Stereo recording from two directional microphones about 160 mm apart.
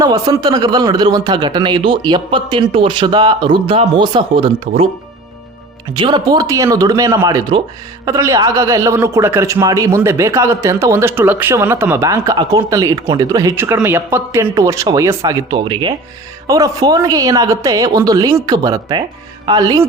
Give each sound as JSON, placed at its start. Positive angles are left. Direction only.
{"t": 0.0, "sound": "a man's voice", "side_deg": -25}
{"t": 5.9, "sound": "a man's voice", "side_deg": -30}